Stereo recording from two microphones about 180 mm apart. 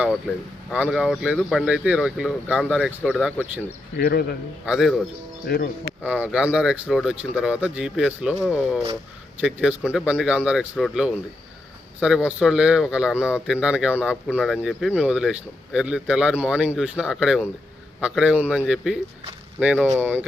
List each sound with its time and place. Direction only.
0.0 s speech: centre (ahead or behind)
3.9 s speech: 65° left (ahead or behind)
4.6 s speech: centre (ahead or behind)
5.5 s speech: 60° left (ahead or behind)
6.0 s speech: 10° right (ahead or behind)